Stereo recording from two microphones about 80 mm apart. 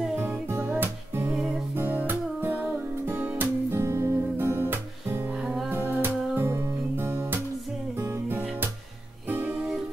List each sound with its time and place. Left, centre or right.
0.2 s music: right
1.3 s music: centre
1.8 s music: right